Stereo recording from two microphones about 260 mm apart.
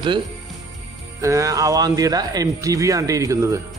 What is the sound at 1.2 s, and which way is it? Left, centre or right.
Speech, centre.